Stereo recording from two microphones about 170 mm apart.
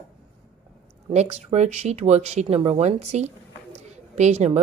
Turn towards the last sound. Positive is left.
turn(degrees=-40)  # may be behind; listen again after turning